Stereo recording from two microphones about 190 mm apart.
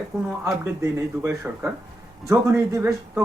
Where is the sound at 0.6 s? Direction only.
15° right (ahead or behind).